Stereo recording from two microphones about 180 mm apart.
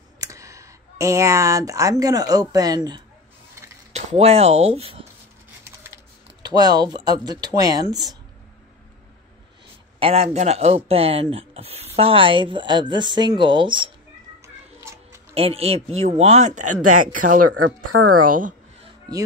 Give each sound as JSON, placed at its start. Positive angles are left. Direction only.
{"t": 0.2, "sound": "speech", "side_deg": -15}
{"t": 3.9, "sound": "speech", "side_deg": -35}
{"t": 6.4, "sound": "speech", "side_deg": -20}
{"t": 9.9, "sound": "speech", "side_deg": -35}
{"t": 14.4, "sound": "a sound", "side_deg": -15}
{"t": 15.3, "sound": "speech", "side_deg": -35}
{"t": 17.9, "sound": "speech", "side_deg": -90}